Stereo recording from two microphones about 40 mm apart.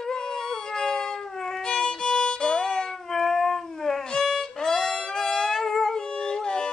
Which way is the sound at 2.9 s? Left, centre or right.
Centre.